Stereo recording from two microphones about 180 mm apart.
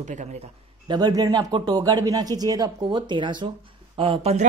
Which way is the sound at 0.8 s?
20° right (ahead or behind).